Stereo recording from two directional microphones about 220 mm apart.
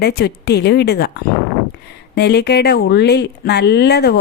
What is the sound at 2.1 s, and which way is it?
Speech, 50° left (ahead or behind).